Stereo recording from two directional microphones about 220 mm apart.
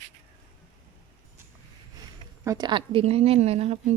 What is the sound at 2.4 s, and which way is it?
A woman's voice, 20° right (ahead or behind).